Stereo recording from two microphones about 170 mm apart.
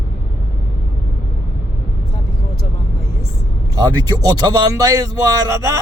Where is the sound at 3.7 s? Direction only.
25° right (ahead or behind).